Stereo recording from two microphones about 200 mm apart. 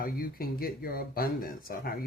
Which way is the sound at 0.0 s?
45° left (ahead or behind).